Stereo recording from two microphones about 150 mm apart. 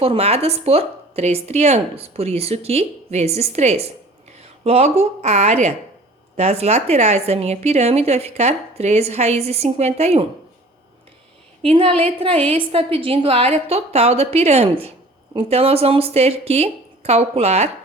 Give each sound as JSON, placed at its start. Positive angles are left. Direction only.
{"t": 0.0, "sound": "a woman's voice", "side_deg": -40}
{"t": 11.6, "sound": "a woman's voice", "side_deg": -40}